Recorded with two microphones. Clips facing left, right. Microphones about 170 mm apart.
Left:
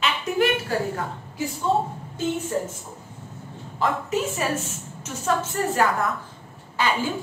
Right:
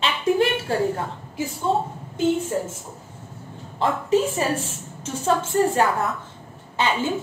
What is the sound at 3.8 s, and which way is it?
A woman's voice, 30° right (ahead or behind).